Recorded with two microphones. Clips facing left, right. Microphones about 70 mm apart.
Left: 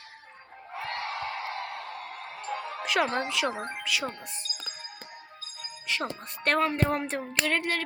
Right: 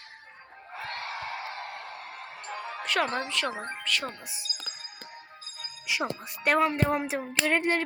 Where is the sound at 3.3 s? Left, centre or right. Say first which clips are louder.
Left 2 dB; centre.